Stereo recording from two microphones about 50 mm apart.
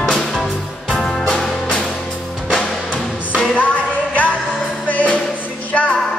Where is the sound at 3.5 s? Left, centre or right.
Left.